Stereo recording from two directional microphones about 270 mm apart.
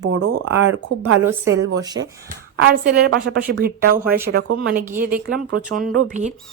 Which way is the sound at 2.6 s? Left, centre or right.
Right.